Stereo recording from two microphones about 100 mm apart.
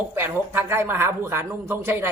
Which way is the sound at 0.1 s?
20° right (ahead or behind).